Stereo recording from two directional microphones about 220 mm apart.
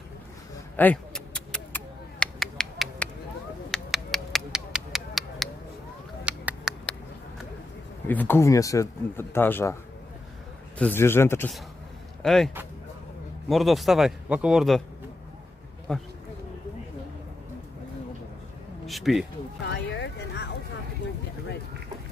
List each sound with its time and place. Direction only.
0.7 s a sound: 5° left (ahead or behind)
8.1 s speech: 10° left (ahead or behind)
10.8 s speech: 10° left (ahead or behind)
13.5 s a man's voice: centre (ahead or behind)
15.9 s a man's voice: 5° left (ahead or behind)
18.9 s a man's voice: centre (ahead or behind)
19.6 s music: 50° left (ahead or behind)